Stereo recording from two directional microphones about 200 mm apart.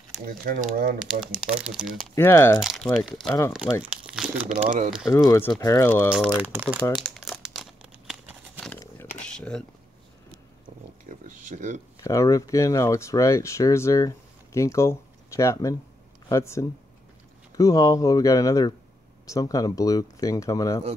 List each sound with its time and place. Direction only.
0.1 s speech: 45° right (ahead or behind)
0.9 s speech: 5° right (ahead or behind)
2.1 s speech: 10° left (ahead or behind)
2.6 s speech: centre (ahead or behind)
3.9 s crumpling: 5° right (ahead or behind)
4.6 s speech: 40° right (ahead or behind)
5.0 s speech: 15° left (ahead or behind)
6.0 s speech: 5° right (ahead or behind)
6.8 s crumpling: centre (ahead or behind)
8.5 s a sound: 10° left (ahead or behind)
11.1 s a sound: 40° right (ahead or behind)
12.0 s speech: 15° left (ahead or behind)